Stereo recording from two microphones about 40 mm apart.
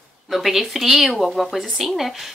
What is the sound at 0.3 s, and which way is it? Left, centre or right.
A woman's voice, centre.